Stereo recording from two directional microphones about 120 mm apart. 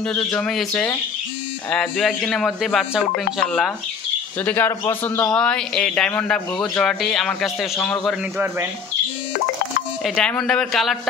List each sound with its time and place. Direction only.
0.4 s speech: 5° left (ahead or behind)
4.5 s speech: 15° left (ahead or behind)
5.2 s speech: 5° left (ahead or behind)
10.0 s speech: 5° left (ahead or behind)